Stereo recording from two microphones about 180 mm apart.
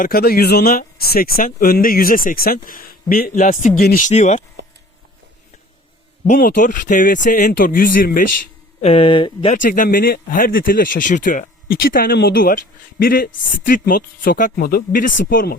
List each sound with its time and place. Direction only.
0.0 s speech: 60° left (ahead or behind); by 4.4 s 40° left (ahead or behind)
6.2 s speech: 50° left (ahead or behind)
8.8 s speech: 30° left (ahead or behind)
9.6 s speech: 45° left (ahead or behind)